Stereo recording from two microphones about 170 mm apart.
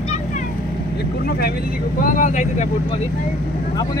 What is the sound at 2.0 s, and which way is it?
Speech, 50° left (ahead or behind).